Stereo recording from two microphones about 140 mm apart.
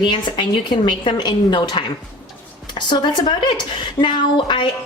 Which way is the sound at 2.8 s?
35° left (ahead or behind).